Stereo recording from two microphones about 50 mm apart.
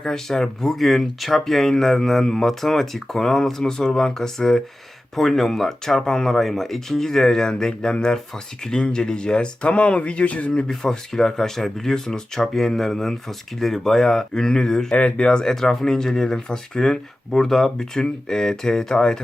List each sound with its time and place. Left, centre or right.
0.0 s speech: centre; by 10.5 s left
10.5 s speech: centre
14.9 s speech: left
15.3 s speech: centre